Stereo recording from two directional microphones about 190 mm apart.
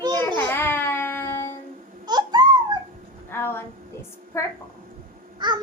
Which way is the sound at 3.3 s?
10° left (ahead or behind).